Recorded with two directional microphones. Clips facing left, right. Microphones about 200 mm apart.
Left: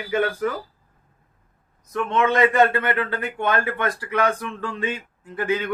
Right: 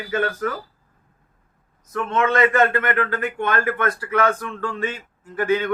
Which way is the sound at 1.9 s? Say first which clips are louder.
Even; 15° left (ahead or behind).